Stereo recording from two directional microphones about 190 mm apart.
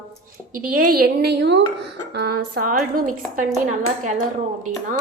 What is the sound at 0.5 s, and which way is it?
A woman's voice, 50° right (ahead or behind).